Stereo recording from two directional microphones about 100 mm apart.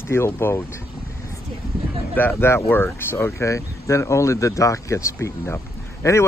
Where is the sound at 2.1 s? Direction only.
25° left (ahead or behind).